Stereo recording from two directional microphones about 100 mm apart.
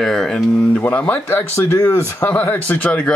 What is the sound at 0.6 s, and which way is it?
Speech, 15° left (ahead or behind).